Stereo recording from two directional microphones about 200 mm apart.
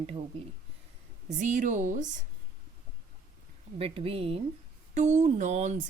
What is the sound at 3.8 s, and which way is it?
A woman's voice, 30° right (ahead or behind).